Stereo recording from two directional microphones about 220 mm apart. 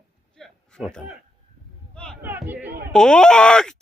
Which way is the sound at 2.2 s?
10° right (ahead or behind).